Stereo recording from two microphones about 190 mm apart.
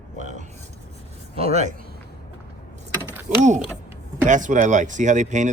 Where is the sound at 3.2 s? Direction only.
40° right (ahead or behind).